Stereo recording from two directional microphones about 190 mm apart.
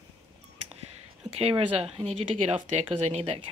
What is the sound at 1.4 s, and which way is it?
Speech, 30° right (ahead or behind).